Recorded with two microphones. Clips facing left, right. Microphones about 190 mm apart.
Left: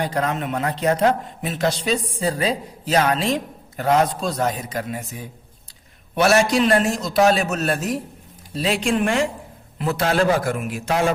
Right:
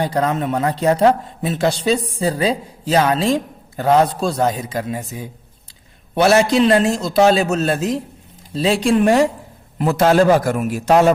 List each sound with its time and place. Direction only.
0.0 s a man's voice: 30° right (ahead or behind)
6.1 s a man's voice: 25° right (ahead or behind)